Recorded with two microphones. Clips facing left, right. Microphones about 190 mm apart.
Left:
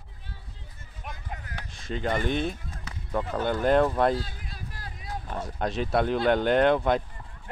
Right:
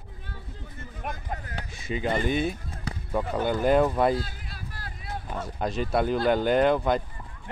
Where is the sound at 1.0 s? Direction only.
50° right (ahead or behind).